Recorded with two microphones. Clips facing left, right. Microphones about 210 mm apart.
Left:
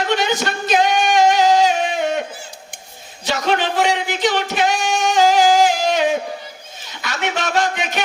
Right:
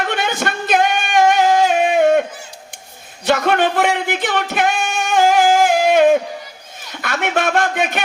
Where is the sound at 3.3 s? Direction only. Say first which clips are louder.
Right 4 dB; 55° right (ahead or behind).